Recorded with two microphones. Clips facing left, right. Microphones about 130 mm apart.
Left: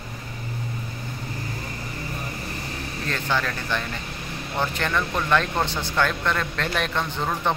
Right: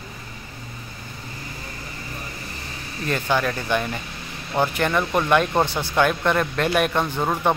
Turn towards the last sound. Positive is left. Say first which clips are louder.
# right 4 dB
turn(degrees=-10)  # may be behind; listen again after turning